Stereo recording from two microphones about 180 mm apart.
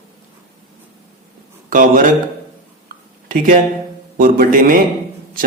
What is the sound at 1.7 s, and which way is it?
Speech, 50° right (ahead or behind).